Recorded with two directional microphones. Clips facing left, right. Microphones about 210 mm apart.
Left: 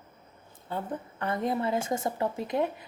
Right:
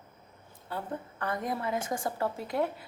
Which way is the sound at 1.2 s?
25° left (ahead or behind).